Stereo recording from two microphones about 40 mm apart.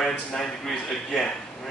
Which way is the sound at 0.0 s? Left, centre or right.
Centre.